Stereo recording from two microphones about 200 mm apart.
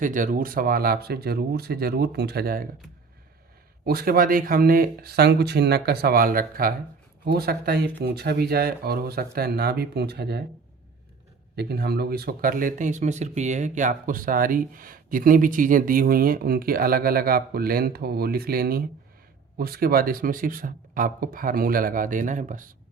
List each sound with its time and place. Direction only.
0.0 s speech: 40° right (ahead or behind)
3.8 s speech: 50° right (ahead or behind)
11.5 s speech: 55° right (ahead or behind)